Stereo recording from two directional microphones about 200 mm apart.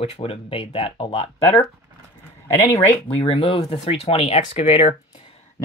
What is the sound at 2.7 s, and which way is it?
Speech, 30° left (ahead or behind).